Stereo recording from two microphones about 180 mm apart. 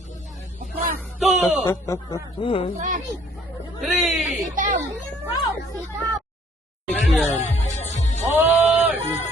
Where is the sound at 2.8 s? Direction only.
45° right (ahead or behind).